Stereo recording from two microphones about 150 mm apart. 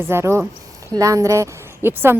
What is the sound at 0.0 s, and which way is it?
A woman's voice, 15° right (ahead or behind).